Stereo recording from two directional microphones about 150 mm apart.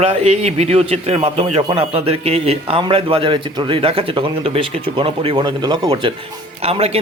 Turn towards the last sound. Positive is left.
turn(degrees=-45)  # may be behind; listen again after turning